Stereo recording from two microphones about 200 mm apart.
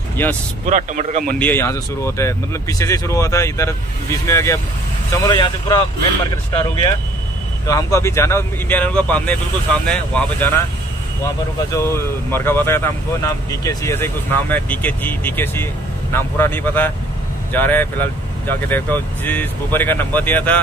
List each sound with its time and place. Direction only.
0.2 s speech: 10° left (ahead or behind)
0.7 s speech: 40° right (ahead or behind)
1.4 s speech: 10° left (ahead or behind)
11.7 s speech: 10° left (ahead or behind)